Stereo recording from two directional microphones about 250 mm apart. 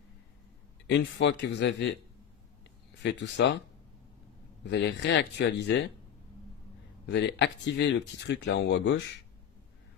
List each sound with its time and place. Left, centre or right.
0.8 s speech: left
3.0 s speech: left
4.6 s speech: left
7.1 s speech: left